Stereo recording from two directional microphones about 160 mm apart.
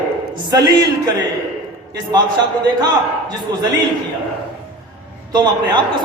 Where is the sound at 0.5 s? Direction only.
25° right (ahead or behind).